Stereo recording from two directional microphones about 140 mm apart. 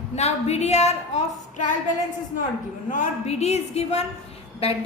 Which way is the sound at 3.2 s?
50° left (ahead or behind).